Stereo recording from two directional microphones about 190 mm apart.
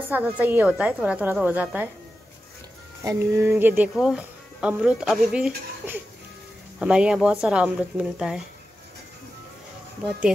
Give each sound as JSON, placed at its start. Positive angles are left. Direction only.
{"t": 0.1, "sound": "a woman's voice", "side_deg": -10}
{"t": 3.0, "sound": "speech", "side_deg": -15}